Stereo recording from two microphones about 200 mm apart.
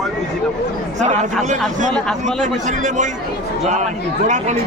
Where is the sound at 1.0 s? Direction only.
35° right (ahead or behind).